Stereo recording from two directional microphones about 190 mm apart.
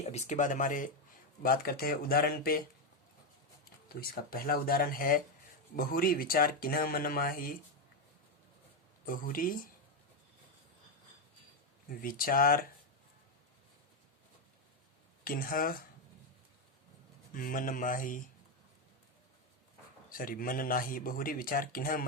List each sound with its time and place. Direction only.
0.0 s speech: 35° left (ahead or behind)
4.0 s speech: 50° left (ahead or behind)
9.0 s speech: 50° left (ahead or behind)
11.9 s speech: 50° left (ahead or behind)
15.2 s speech: 50° left (ahead or behind)
17.3 s speech: 45° left (ahead or behind)
20.1 s speech: 45° left (ahead or behind)